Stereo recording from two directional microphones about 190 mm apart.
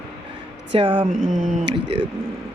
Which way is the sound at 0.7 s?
25° right (ahead or behind).